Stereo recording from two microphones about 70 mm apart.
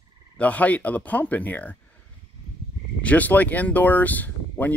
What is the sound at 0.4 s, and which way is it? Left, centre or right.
Speech, left.